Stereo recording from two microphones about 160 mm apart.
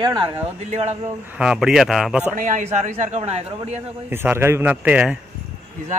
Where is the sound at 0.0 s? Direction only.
25° right (ahead or behind).